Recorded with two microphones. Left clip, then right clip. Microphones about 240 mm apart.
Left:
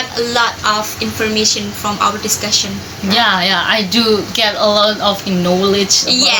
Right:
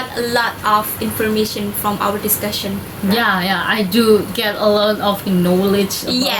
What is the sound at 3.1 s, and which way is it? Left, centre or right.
A woman's voice, centre.